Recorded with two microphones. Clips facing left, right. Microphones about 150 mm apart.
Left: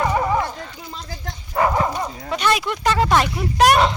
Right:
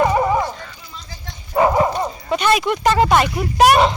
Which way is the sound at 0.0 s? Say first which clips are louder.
Right 3 dB; 20° right (ahead or behind).